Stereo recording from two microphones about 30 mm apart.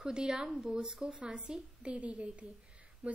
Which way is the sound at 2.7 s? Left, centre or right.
Right.